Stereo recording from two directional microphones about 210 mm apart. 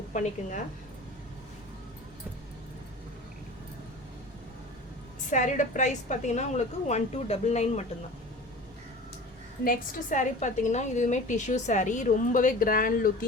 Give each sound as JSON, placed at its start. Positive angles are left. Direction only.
{"t": 0.1, "sound": "a woman's voice", "side_deg": 35}
{"t": 5.3, "sound": "a woman's voice", "side_deg": 35}
{"t": 9.6, "sound": "a woman's voice", "side_deg": 40}